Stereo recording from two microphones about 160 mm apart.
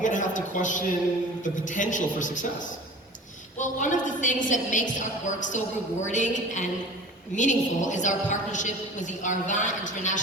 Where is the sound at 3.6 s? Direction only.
50° left (ahead or behind).